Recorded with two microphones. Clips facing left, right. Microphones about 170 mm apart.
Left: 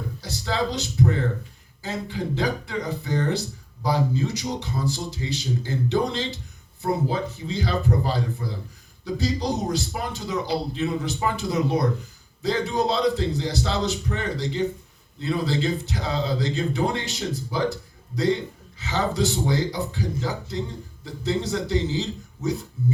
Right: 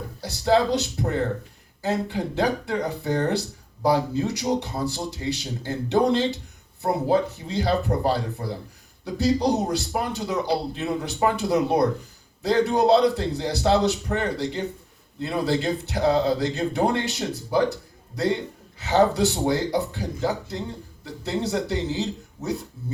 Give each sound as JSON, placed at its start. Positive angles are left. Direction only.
{"t": 0.2, "sound": "a man's voice", "side_deg": -60}
{"t": 18.8, "sound": "a man's voice", "side_deg": -60}